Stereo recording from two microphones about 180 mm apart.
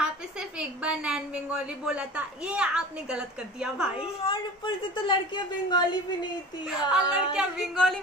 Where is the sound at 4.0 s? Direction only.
30° left (ahead or behind).